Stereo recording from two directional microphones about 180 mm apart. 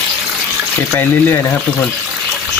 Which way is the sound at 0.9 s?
15° left (ahead or behind).